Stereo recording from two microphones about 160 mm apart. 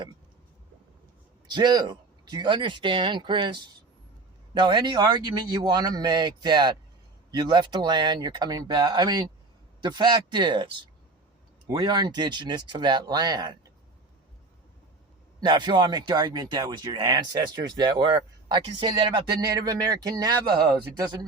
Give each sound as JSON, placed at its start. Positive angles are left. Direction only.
{"t": 1.5, "sound": "speech", "side_deg": -25}
{"t": 15.4, "sound": "speech", "side_deg": -30}